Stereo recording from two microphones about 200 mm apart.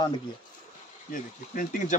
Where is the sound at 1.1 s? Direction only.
40° left (ahead or behind).